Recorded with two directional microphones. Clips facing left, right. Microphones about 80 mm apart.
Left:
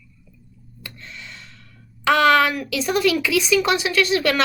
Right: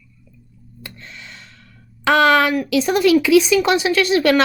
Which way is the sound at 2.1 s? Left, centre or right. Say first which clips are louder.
Right 2 dB; right.